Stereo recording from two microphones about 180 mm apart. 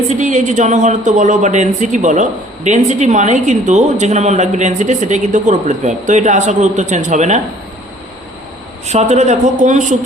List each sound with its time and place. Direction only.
0.1 s a woman's voice: 40° right (ahead or behind)
8.9 s a woman's voice: 40° right (ahead or behind)